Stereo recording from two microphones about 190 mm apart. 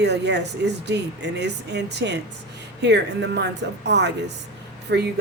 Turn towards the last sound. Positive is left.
turn(degrees=-65)  # may be behind; listen again after turning